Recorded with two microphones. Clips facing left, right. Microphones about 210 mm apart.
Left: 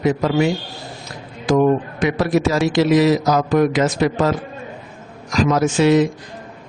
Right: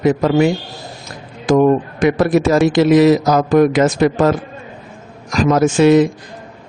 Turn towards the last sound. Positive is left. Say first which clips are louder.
# right 4 dB
turn(degrees=-55)  # may be behind; listen again after turning